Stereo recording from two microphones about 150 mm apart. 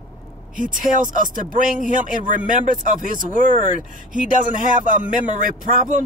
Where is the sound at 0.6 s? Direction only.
60° right (ahead or behind).